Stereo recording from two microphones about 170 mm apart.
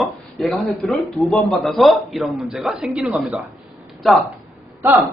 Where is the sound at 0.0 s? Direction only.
Centre (ahead or behind).